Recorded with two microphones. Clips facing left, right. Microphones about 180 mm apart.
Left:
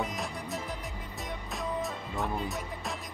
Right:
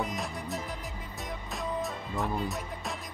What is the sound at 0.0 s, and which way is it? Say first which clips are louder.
Music: right 1 dB; centre (ahead or behind).